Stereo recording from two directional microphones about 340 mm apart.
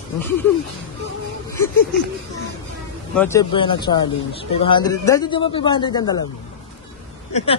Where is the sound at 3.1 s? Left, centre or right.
Centre.